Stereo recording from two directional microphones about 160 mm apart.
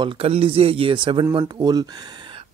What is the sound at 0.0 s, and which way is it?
Speech, 35° right (ahead or behind).